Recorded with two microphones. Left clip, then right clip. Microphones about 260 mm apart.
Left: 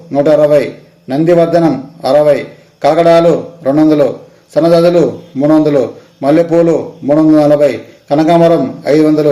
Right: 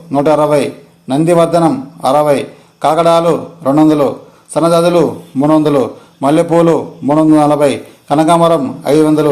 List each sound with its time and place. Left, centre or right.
0.1 s a man's voice: centre